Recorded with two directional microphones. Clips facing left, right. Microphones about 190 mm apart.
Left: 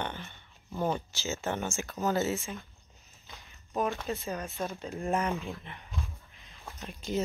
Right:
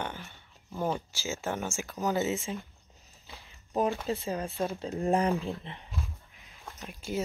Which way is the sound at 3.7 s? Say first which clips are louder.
Right 3 dB; 30° right (ahead or behind).